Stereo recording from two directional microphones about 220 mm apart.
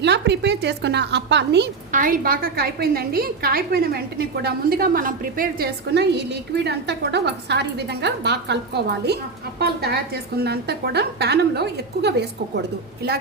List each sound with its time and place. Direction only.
0.0 s a woman's voice: 50° right (ahead or behind)
1.9 s a woman's voice: 40° right (ahead or behind)